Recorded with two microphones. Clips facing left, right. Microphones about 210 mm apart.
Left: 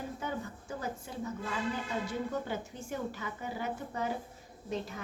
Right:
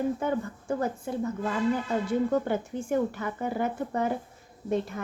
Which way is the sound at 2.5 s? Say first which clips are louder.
Right 10 dB; 55° right (ahead or behind).